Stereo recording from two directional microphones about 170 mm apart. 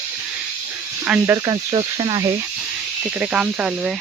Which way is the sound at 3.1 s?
10° right (ahead or behind).